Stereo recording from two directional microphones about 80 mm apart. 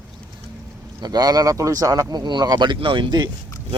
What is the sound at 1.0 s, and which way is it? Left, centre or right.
Speech, right.